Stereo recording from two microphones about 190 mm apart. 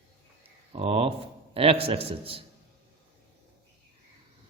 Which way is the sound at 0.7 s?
30° right (ahead or behind).